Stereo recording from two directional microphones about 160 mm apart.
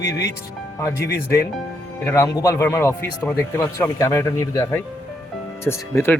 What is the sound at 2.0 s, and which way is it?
Speech, 20° left (ahead or behind).